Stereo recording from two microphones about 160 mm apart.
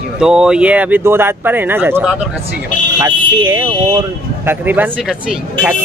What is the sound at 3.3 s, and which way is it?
Speech, 25° right (ahead or behind).